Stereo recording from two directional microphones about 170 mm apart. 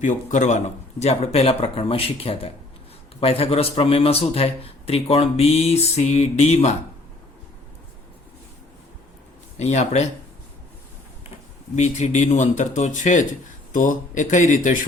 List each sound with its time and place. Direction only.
0.0 s a man's voice: 45° left (ahead or behind)
9.6 s a man's voice: 40° left (ahead or behind)
11.7 s speech: 40° left (ahead or behind)